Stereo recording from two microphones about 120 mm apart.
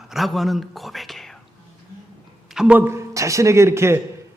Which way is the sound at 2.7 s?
20° right (ahead or behind).